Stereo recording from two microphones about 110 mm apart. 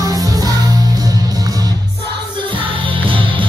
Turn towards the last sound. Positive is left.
turn(degrees=-50)  # may be behind; listen again after turning